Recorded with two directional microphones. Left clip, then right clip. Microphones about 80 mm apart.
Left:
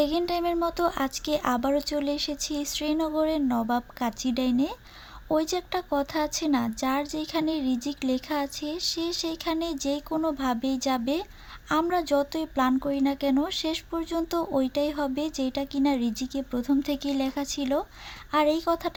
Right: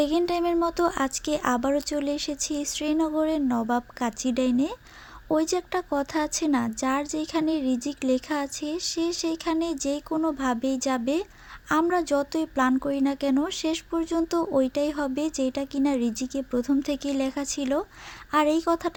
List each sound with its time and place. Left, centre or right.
0.0 s speech: right